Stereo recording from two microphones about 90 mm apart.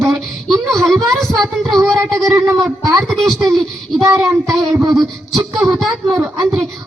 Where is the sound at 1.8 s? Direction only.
35° right (ahead or behind).